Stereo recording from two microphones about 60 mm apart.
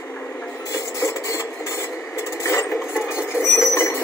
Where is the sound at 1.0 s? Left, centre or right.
Left.